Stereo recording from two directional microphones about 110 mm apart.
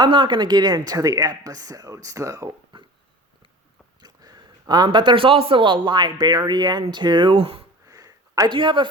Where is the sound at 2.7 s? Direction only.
50° right (ahead or behind).